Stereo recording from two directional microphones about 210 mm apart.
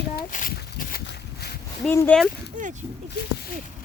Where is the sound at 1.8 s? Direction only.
5° left (ahead or behind).